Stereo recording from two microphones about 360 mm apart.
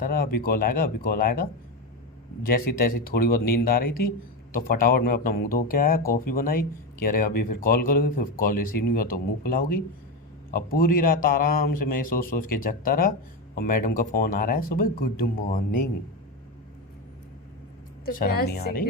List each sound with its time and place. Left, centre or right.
0.0 s speech: left
18.0 s speech: left